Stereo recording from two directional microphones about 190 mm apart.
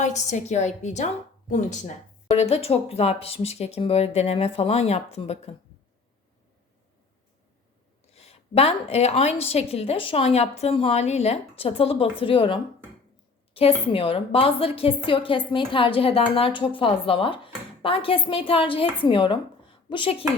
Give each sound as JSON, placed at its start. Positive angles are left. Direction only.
{"t": 0.0, "sound": "a woman's voice", "side_deg": 40}
{"t": 8.1, "sound": "a woman's voice", "side_deg": 30}